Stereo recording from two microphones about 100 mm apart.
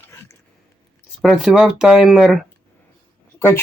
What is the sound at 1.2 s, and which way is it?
Speech, 5° right (ahead or behind).